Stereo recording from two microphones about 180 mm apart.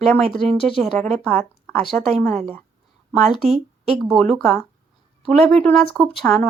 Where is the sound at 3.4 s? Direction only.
35° right (ahead or behind).